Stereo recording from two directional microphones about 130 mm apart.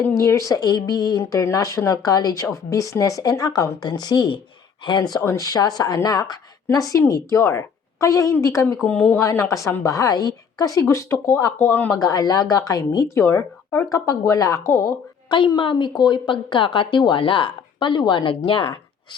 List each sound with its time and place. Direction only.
0.0 s speech: 20° left (ahead or behind)
8.9 s speech: 15° left (ahead or behind)
11.9 s speech: 30° left (ahead or behind)
15.3 s a woman's voice: 35° left (ahead or behind)